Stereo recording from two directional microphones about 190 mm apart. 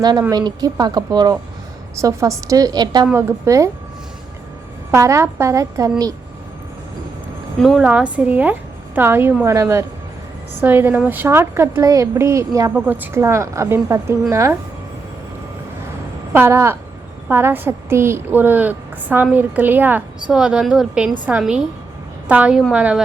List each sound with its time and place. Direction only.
0.0 s speech: 20° right (ahead or behind)
4.9 s speech: 15° right (ahead or behind)
7.6 s speech: centre (ahead or behind)
16.3 s a woman's voice: 10° right (ahead or behind)